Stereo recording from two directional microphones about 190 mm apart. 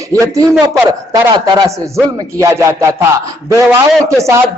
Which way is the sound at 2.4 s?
15° right (ahead or behind).